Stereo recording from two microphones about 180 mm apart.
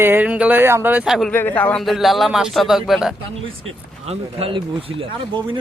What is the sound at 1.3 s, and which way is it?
Speech, 10° left (ahead or behind).